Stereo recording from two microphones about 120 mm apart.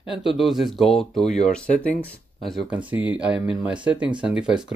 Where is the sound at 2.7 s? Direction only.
10° right (ahead or behind).